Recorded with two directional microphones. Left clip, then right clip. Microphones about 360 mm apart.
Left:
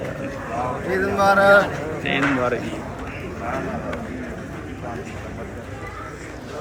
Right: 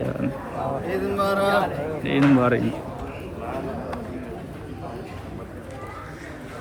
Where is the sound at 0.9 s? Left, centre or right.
Centre.